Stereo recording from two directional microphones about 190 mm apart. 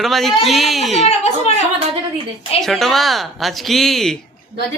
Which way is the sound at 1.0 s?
35° left (ahead or behind).